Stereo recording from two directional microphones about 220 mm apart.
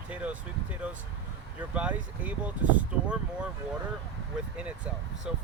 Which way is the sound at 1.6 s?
5° right (ahead or behind).